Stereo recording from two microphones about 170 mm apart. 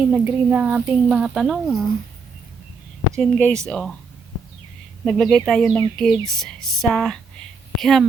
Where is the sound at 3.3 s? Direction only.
5° left (ahead or behind).